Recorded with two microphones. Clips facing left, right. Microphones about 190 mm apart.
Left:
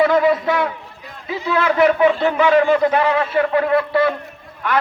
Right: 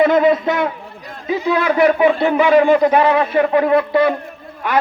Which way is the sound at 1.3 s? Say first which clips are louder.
Right 3 dB; 15° right (ahead or behind).